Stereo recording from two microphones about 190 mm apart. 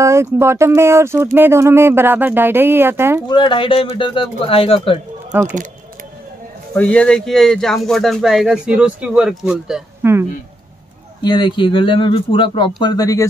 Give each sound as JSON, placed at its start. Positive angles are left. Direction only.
{"t": 0.0, "sound": "speech", "side_deg": -15}
{"t": 3.3, "sound": "speech", "side_deg": 25}
{"t": 6.7, "sound": "speech", "side_deg": 5}
{"t": 11.2, "sound": "speech", "side_deg": 25}